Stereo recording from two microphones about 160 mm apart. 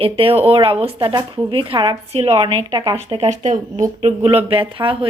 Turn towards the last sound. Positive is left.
turn(degrees=-30)  # may be behind; listen again after turning